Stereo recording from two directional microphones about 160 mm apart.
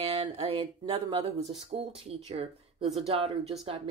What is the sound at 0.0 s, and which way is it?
Speech, 35° right (ahead or behind).